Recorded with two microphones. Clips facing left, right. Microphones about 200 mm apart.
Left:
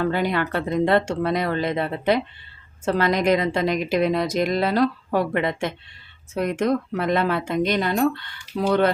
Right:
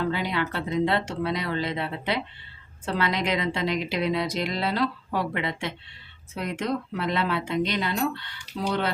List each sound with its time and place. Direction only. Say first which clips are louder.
0.0 s a woman's voice: left 5 dB; 50° left (ahead or behind)